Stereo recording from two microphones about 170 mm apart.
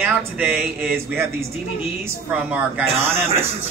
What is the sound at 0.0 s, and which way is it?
Speech, 10° right (ahead or behind).